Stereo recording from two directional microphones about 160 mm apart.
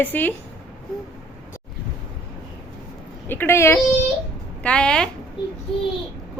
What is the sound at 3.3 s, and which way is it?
A woman's voice, 15° left (ahead or behind).